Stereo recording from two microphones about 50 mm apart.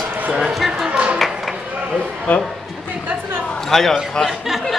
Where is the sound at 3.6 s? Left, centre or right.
Centre.